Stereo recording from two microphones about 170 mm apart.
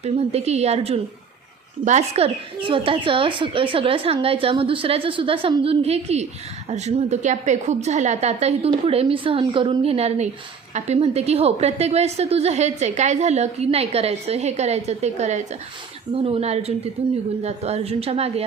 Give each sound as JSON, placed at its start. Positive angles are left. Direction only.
{"t": 0.0, "sound": "a woman's voice", "side_deg": -40}